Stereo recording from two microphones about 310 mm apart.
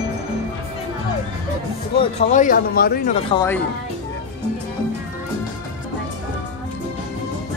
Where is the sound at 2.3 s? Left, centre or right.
Left.